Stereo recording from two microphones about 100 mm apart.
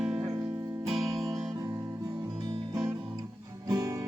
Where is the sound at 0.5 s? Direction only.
35° right (ahead or behind).